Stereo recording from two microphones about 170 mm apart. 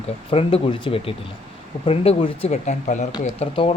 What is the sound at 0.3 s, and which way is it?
Speech, 30° left (ahead or behind).